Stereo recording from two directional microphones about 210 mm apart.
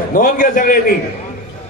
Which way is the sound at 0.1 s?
40° left (ahead or behind).